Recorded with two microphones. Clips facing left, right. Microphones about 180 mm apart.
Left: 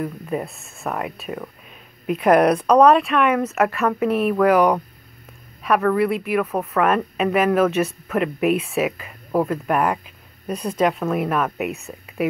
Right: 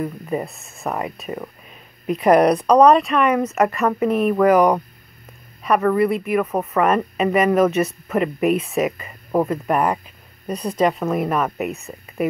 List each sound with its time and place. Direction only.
0.0 s speech: 5° right (ahead or behind)